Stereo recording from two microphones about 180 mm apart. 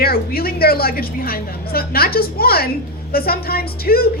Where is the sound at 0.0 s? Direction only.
60° left (ahead or behind).